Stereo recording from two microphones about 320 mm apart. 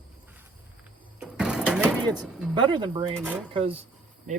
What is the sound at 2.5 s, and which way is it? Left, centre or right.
Speech, centre.